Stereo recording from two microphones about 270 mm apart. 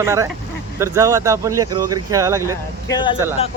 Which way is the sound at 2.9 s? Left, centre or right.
Centre.